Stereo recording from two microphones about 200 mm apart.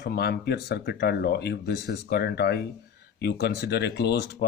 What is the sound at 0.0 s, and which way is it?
Speech, 55° left (ahead or behind).